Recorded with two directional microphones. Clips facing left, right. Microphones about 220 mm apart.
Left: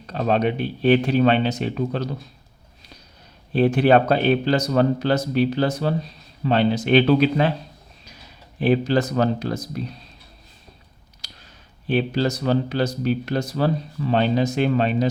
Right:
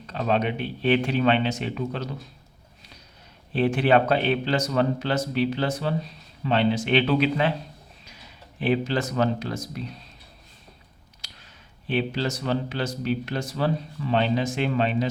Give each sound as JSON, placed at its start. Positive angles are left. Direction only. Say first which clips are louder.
{"t": 0.1, "sound": "speech", "louder": "left 4 dB", "side_deg": 40}
{"t": 3.5, "sound": "speech", "louder": "left 4 dB", "side_deg": 40}
{"t": 11.2, "sound": "a sound", "louder": "left 3 dB", "side_deg": 35}
{"t": 11.9, "sound": "speech", "louder": "left 5 dB", "side_deg": 40}